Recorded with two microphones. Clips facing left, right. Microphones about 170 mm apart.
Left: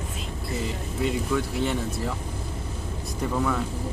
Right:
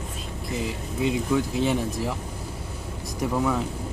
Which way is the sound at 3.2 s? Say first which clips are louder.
Right 2 dB; 10° right (ahead or behind).